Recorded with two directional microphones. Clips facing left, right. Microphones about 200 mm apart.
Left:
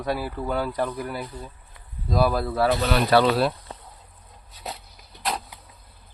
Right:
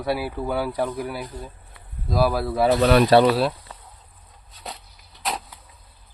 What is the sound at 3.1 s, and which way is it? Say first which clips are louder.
Speech: right 2 dB; 30° right (ahead or behind).